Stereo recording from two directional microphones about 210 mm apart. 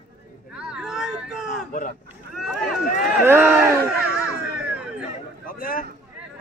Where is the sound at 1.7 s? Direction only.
40° left (ahead or behind).